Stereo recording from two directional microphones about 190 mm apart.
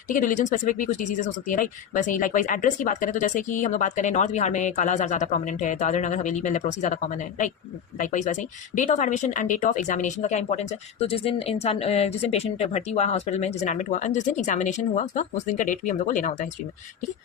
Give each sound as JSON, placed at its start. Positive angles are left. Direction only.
{"t": 0.1, "sound": "speech", "side_deg": 45}